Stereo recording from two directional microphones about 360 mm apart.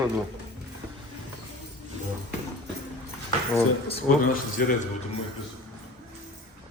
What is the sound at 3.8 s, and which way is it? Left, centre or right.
Speech, centre.